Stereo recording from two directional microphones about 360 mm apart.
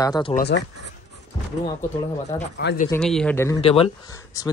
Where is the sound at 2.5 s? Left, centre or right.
Left.